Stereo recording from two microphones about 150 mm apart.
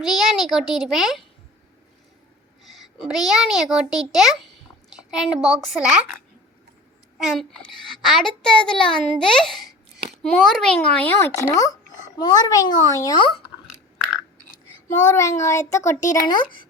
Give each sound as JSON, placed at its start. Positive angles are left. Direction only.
{"t": 0.0, "sound": "a child's voice", "side_deg": 0}
{"t": 2.6, "sound": "a sound", "side_deg": 0}
{"t": 3.2, "sound": "a child's voice", "side_deg": 0}
{"t": 7.2, "sound": "a child's voice", "side_deg": 0}
{"t": 13.1, "sound": "speech", "side_deg": 35}
{"t": 15.1, "sound": "a child's voice", "side_deg": 20}
{"t": 16.0, "sound": "speech", "side_deg": 30}